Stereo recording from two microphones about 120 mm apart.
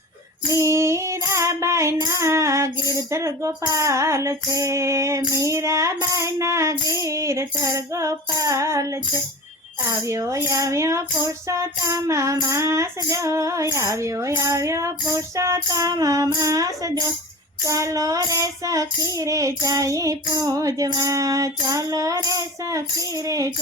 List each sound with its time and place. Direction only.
0.4 s child singing: 25° right (ahead or behind)